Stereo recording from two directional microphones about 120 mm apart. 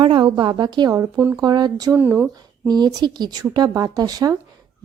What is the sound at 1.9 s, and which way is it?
Speech, 15° right (ahead or behind).